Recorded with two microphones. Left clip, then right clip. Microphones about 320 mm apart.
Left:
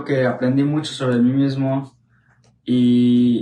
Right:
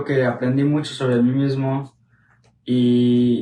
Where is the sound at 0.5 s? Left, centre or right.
Centre.